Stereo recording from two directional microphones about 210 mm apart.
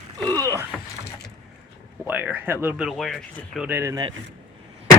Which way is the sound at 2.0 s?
10° right (ahead or behind).